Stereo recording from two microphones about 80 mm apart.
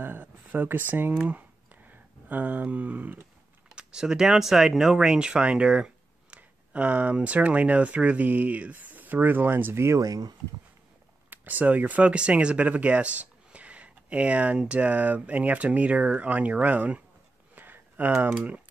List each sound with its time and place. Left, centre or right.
0.0 s speech: right
1.2 s a sound: right
3.7 s speech: centre; by 10.0 s right
10.0 s speech: right
11.2 s speech: right
17.6 s a sound: right